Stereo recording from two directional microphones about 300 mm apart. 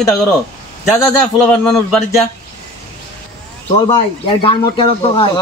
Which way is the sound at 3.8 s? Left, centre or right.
Centre.